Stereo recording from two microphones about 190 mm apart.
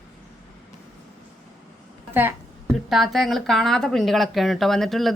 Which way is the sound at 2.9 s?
Centre (ahead or behind).